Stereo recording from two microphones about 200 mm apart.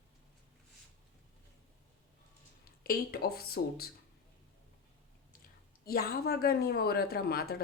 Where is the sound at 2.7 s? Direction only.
50° left (ahead or behind).